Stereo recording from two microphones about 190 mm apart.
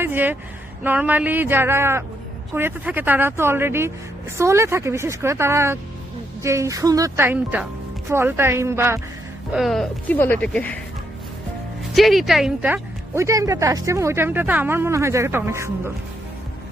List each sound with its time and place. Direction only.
0.0 s speech: 10° right (ahead or behind)
9.5 s speech: centre (ahead or behind)
11.8 s speech: centre (ahead or behind)